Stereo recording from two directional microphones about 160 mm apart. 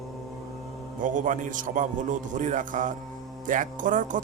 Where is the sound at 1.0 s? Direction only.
50° right (ahead or behind).